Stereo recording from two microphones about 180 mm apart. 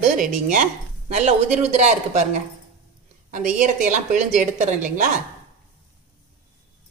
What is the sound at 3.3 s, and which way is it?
A woman's voice, 45° right (ahead or behind).